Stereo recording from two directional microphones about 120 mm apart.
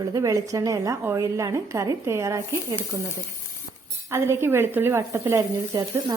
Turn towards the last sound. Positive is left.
turn(degrees=-25)  # may be behind; listen again after turning